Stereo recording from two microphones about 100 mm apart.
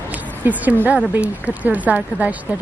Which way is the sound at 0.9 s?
15° right (ahead or behind).